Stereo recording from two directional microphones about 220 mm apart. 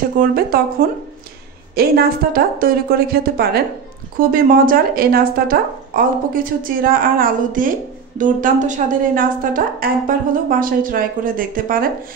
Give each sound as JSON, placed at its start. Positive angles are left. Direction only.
{"t": 0.3, "sound": "a woman's voice", "side_deg": -40}